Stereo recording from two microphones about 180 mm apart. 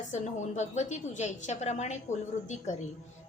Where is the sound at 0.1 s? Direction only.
40° left (ahead or behind).